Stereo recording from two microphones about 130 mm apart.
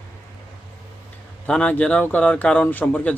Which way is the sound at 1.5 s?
10° left (ahead or behind).